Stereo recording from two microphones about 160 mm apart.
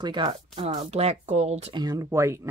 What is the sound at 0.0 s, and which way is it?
Speech, 30° right (ahead or behind).